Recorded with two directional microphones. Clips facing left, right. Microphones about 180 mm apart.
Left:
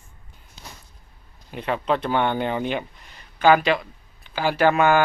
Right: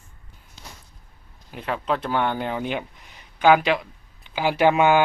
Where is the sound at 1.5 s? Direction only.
Centre (ahead or behind).